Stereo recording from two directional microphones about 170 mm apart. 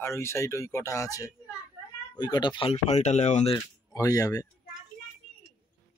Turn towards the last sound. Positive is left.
turn(degrees=20)  # may be behind; listen again after turning